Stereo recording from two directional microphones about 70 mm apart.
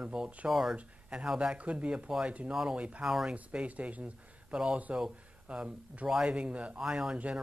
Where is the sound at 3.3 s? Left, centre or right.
Centre.